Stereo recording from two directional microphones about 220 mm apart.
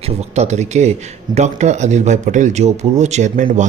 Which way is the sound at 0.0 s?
30° right (ahead or behind).